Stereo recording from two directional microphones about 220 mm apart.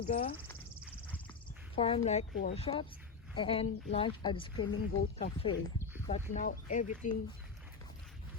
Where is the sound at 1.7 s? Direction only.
25° left (ahead or behind).